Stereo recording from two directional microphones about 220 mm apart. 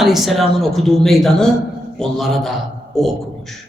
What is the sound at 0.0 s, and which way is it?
A man's voice, centre (ahead or behind).